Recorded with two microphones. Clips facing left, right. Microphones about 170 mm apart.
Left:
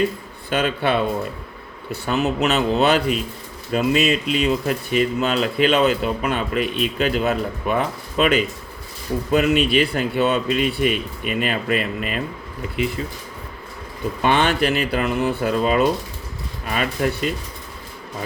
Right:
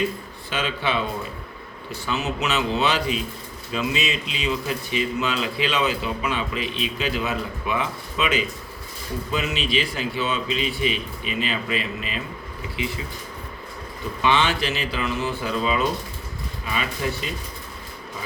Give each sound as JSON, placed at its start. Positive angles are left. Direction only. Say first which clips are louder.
{"t": 0.5, "sound": "a man's voice", "louder": "left 5 dB", "side_deg": 55}
{"t": 2.0, "sound": "a man's voice", "louder": "left 6 dB", "side_deg": 55}
{"t": 14.2, "sound": "speech", "louder": "left 3 dB", "side_deg": 50}